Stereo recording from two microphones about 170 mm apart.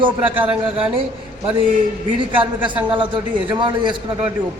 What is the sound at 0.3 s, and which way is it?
Speech, 10° right (ahead or behind).